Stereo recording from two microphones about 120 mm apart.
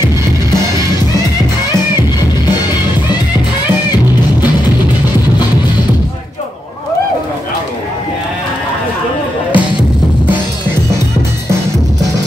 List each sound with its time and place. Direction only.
9.5 s music: 45° left (ahead or behind)